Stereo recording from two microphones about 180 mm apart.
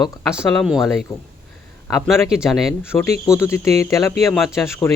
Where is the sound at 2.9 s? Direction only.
15° left (ahead or behind).